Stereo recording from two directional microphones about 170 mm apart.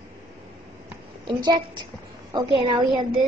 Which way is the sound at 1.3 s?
25° right (ahead or behind).